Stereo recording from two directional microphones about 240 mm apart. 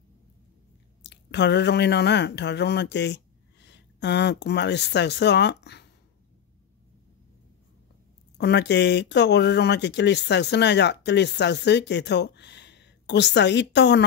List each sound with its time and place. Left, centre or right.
1.0 s speech: left
8.4 s speech: left